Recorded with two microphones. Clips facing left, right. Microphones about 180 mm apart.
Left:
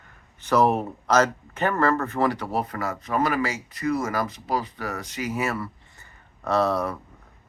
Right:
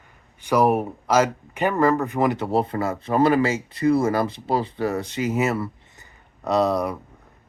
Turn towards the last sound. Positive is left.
turn(degrees=-15)  # may be behind; listen again after turning